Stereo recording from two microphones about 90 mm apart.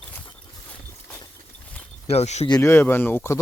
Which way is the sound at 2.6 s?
25° left (ahead or behind).